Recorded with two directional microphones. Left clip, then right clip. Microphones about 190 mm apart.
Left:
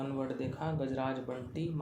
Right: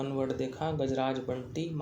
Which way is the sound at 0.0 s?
30° right (ahead or behind).